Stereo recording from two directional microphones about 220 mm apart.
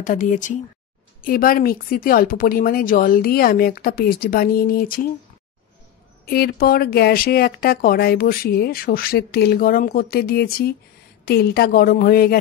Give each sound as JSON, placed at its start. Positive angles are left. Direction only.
{"t": 0.0, "sound": "speech", "side_deg": 35}
{"t": 6.2, "sound": "speech", "side_deg": 45}